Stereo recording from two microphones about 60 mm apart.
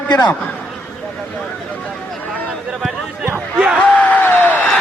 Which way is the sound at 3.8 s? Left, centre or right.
Left.